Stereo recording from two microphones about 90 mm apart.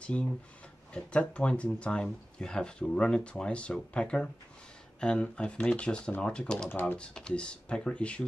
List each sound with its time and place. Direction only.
0.0 s speech: 15° left (ahead or behind)
6.7 s speech: 20° left (ahead or behind)
7.0 s speech: 10° left (ahead or behind)